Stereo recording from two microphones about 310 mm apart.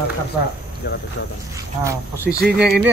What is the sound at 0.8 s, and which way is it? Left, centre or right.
Speech, left.